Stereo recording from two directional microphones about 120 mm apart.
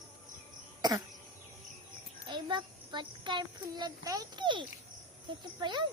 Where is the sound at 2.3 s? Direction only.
40° right (ahead or behind).